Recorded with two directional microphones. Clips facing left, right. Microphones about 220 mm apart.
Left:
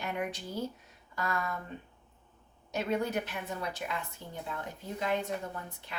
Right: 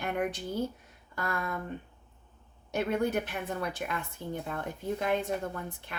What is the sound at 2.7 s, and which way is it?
Speech, 55° right (ahead or behind).